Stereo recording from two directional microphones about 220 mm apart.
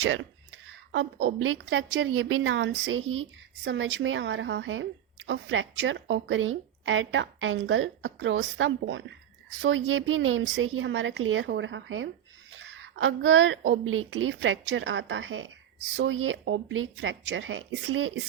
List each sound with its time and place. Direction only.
0.0 s a woman's voice: 60° right (ahead or behind)